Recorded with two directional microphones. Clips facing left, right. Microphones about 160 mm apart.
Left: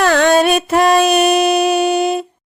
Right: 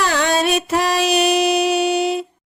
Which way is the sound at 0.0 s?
60° left (ahead or behind).